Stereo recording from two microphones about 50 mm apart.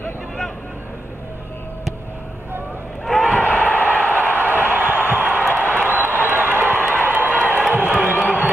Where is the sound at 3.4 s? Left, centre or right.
Left.